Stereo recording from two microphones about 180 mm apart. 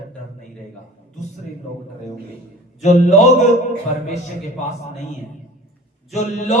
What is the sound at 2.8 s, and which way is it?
Speech, 40° left (ahead or behind).